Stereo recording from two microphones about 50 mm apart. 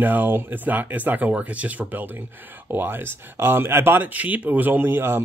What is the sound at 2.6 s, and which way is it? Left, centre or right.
Speech, right.